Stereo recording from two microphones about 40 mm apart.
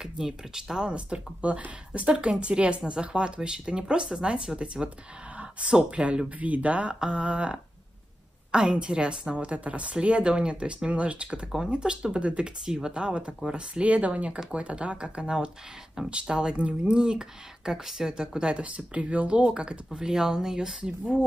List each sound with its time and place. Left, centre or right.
0.0 s a woman's voice: centre
19.9 s speech: centre